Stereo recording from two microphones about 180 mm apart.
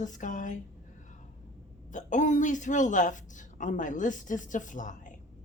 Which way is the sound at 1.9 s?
45° left (ahead or behind).